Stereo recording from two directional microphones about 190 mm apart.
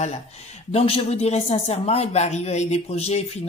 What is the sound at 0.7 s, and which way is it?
Speech, 30° left (ahead or behind).